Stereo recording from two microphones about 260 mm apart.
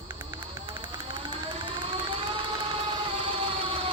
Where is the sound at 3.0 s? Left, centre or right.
Centre.